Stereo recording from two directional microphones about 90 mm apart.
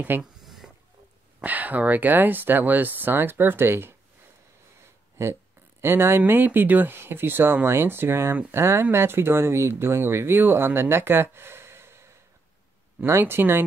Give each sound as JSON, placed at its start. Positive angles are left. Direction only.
{"t": 0.2, "sound": "a sound", "side_deg": 0}
{"t": 1.4, "sound": "speech", "side_deg": -20}
{"t": 5.2, "sound": "speech", "side_deg": -25}